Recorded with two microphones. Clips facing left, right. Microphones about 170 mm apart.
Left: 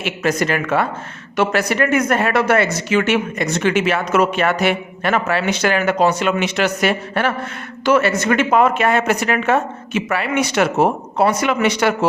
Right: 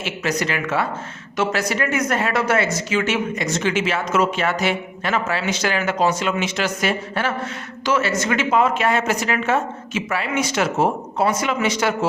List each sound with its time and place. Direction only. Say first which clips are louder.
0.0 s speech: left 4 dB; 50° left (ahead or behind)